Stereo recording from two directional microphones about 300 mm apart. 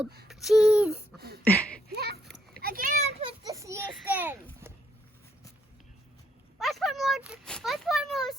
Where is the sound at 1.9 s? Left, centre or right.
Right; by 4.7 s centre.